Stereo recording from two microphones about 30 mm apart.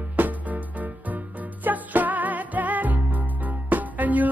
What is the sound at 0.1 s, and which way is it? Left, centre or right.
Music, right.